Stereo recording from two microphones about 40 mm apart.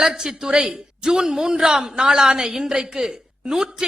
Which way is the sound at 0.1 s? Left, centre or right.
Centre.